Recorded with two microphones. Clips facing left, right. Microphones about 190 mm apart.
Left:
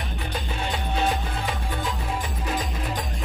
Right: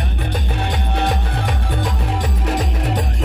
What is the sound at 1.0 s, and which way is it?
Music, 70° right (ahead or behind).